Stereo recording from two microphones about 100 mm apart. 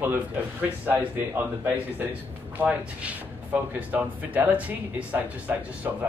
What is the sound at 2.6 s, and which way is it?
Speech, 15° right (ahead or behind).